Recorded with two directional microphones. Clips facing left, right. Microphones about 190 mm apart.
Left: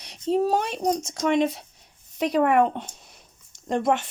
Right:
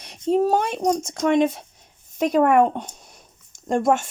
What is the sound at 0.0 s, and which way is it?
Speech, 50° right (ahead or behind).